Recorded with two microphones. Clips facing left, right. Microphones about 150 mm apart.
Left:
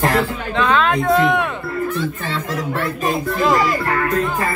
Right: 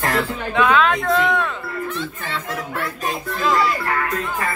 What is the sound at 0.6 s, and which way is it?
Speech, 5° right (ahead or behind).